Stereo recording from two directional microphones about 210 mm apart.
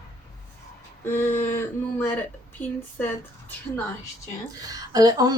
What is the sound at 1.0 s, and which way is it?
Speech, 10° left (ahead or behind).